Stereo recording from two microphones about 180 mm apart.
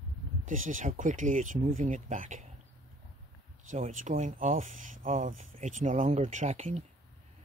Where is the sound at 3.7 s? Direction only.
40° right (ahead or behind).